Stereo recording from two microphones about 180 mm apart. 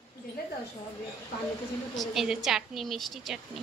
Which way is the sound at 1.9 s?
Centre (ahead or behind).